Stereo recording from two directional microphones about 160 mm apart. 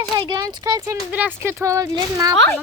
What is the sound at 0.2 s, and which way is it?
Speech, 25° right (ahead or behind).